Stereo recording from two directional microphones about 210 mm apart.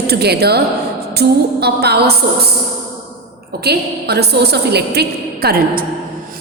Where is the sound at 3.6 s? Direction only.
50° right (ahead or behind).